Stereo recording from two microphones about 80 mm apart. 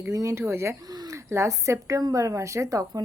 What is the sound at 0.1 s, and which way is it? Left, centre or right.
Speech, right.